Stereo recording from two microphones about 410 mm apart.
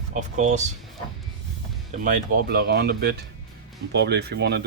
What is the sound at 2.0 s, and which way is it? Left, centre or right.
Speech, right.